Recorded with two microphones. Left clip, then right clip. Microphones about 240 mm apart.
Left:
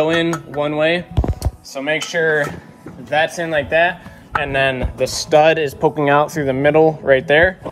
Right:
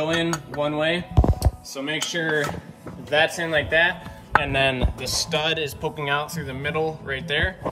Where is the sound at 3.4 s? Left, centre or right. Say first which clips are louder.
Left 4 dB; left.